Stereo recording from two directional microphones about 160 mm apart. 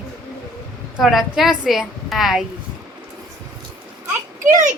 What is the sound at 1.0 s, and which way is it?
Speech, centre (ahead or behind).